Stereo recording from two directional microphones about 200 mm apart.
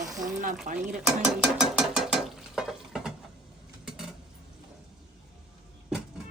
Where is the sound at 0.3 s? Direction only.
40° right (ahead or behind).